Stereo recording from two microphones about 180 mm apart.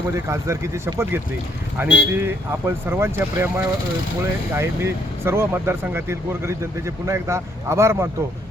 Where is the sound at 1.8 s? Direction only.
85° left.